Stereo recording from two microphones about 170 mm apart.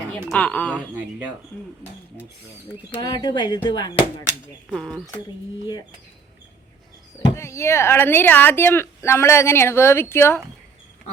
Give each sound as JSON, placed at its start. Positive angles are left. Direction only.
{"t": 0.3, "sound": "speech", "side_deg": 10}
{"t": 3.0, "sound": "speech", "side_deg": 25}
{"t": 4.7, "sound": "speech", "side_deg": 0}
{"t": 7.3, "sound": "speech", "side_deg": 15}